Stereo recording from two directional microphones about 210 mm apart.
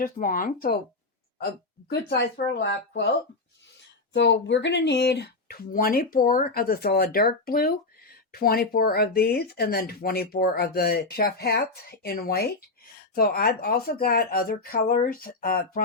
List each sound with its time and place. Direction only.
0.0 s speech: 45° left (ahead or behind)
1.9 s speech: 50° left (ahead or behind)